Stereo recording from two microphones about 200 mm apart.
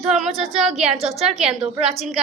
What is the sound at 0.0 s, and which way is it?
A woman's voice, centre (ahead or behind).